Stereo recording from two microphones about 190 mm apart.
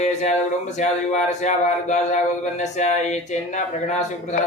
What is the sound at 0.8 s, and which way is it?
Speech, 40° left (ahead or behind).